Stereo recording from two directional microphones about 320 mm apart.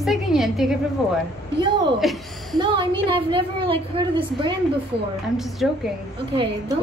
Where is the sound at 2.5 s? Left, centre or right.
Centre.